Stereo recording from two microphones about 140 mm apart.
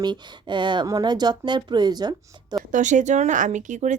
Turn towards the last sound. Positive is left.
turn(degrees=-60)  # may be behind; listen again after turning